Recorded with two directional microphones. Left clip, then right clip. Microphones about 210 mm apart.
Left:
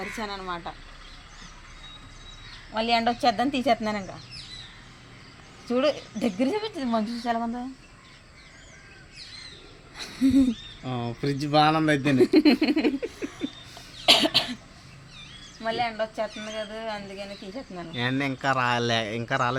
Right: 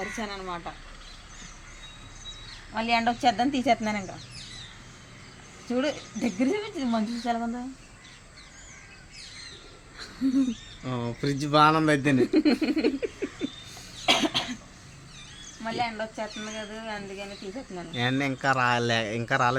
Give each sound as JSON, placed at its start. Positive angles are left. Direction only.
{"t": 0.0, "sound": "speech", "side_deg": 25}
{"t": 2.7, "sound": "speech", "side_deg": 35}
{"t": 5.6, "sound": "speech", "side_deg": 35}
{"t": 10.0, "sound": "a sound", "side_deg": 30}
{"t": 10.8, "sound": "a man's voice", "side_deg": 0}
{"t": 12.2, "sound": "speech", "side_deg": 40}
{"t": 13.0, "sound": "a sound", "side_deg": -5}
{"t": 14.0, "sound": "cough", "side_deg": 40}
{"t": 15.6, "sound": "speech", "side_deg": 30}
{"t": 17.9, "sound": "a man's voice", "side_deg": 0}